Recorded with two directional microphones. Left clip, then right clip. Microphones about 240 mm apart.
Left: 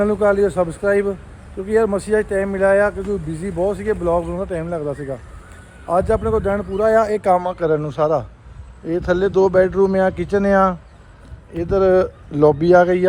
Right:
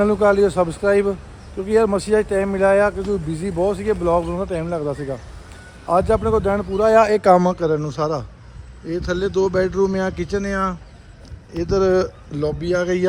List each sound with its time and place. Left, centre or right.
0.0 s speech: centre
7.2 s speech: right
7.5 s a man's voice: centre
12.4 s speech: centre